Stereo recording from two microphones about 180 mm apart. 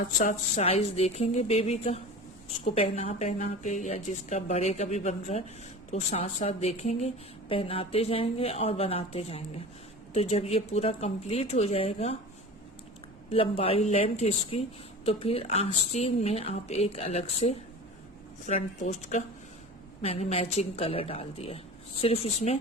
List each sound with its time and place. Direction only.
0.2 s a woman's voice: 40° left (ahead or behind)
13.3 s a woman's voice: 30° left (ahead or behind)